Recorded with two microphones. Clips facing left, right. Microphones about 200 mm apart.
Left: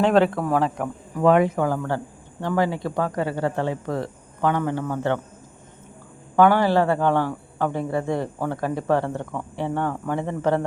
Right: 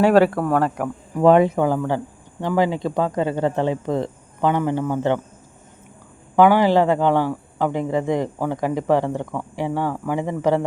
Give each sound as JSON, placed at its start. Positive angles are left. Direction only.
{"t": 0.0, "sound": "speech", "side_deg": -5}
{"t": 1.2, "sound": "speech", "side_deg": -30}
{"t": 6.3, "sound": "a man's voice", "side_deg": -15}